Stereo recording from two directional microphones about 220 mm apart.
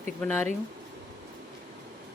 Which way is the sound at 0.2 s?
10° left (ahead or behind).